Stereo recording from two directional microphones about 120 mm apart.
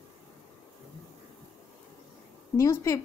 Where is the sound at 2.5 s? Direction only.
30° left (ahead or behind).